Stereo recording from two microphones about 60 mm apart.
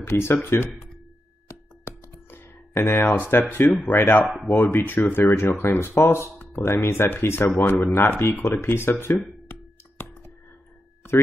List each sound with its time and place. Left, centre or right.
0.0 s speech: left
1.5 s computer keyboard: left
3.6 s speech: left
3.9 s speech: left
10.0 s clicking: left